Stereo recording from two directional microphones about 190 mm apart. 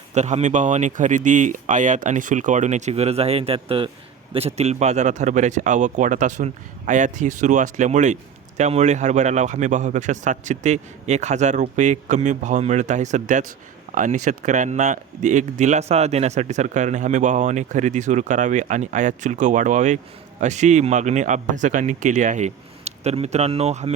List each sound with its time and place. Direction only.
0.1 s a man's voice: 35° right (ahead or behind)